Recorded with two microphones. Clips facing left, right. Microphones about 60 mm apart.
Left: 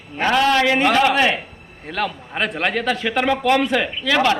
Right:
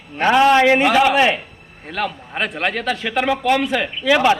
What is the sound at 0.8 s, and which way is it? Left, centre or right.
A man's voice, centre.